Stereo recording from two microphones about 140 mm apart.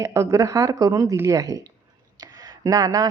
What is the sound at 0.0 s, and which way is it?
Speech, 20° right (ahead or behind).